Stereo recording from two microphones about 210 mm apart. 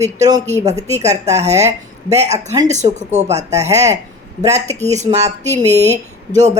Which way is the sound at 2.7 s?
35° right (ahead or behind).